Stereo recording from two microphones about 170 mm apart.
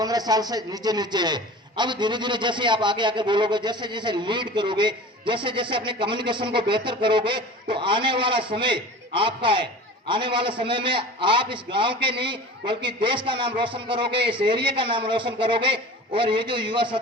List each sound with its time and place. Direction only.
0.0 s a man's voice: 25° right (ahead or behind)